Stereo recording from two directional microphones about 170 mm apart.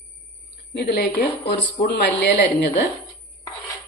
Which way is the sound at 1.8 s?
75° left (ahead or behind).